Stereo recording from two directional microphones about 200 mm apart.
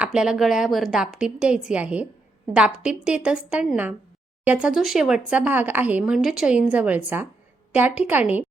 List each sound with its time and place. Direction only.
0.0 s a woman's voice: 5° right (ahead or behind)